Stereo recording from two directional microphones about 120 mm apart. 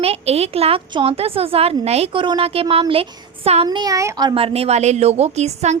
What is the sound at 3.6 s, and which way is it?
Speech, 35° right (ahead or behind).